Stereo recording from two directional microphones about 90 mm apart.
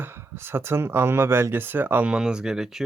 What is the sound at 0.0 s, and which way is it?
Speech, 25° right (ahead or behind).